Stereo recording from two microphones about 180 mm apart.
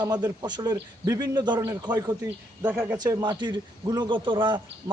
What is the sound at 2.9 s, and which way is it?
A man's voice, 25° right (ahead or behind).